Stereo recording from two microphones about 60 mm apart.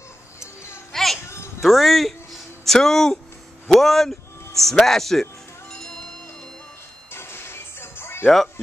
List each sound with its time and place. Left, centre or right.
0.9 s children playing: centre
1.6 s a man's voice: centre
7.1 s music: left